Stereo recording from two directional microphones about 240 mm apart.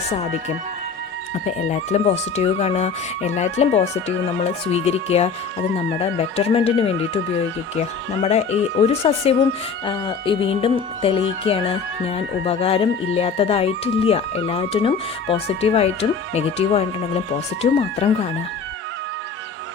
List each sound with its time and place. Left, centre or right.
1.5 s speech: left
8.2 s speech: left